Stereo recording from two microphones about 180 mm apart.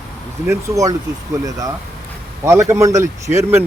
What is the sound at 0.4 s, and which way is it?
A man's voice, 20° right (ahead or behind).